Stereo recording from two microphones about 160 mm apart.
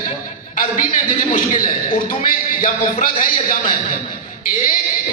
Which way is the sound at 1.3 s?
55° left (ahead or behind).